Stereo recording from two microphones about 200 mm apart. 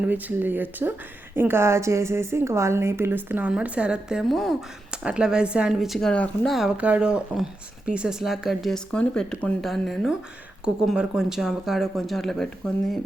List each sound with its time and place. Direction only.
0.1 s a woman's voice: 10° right (ahead or behind)